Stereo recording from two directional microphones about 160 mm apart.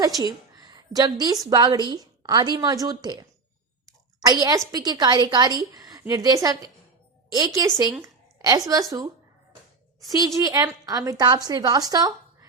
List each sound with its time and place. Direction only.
0.2 s a woman's voice: 25° right (ahead or behind)
8.0 s a sound: 25° right (ahead or behind)
10.1 s a woman's voice: 20° right (ahead or behind)